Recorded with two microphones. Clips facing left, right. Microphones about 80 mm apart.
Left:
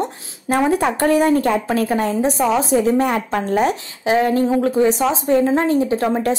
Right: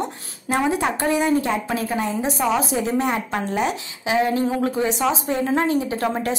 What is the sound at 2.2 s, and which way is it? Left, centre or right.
Speech, centre.